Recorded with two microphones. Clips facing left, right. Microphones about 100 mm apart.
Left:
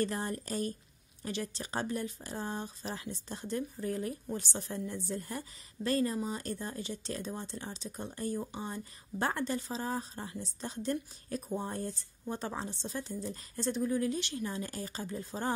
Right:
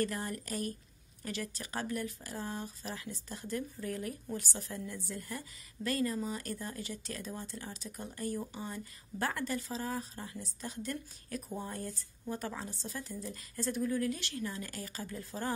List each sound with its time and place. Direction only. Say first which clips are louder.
0.0 s speech: left 2 dB; 30° left (ahead or behind)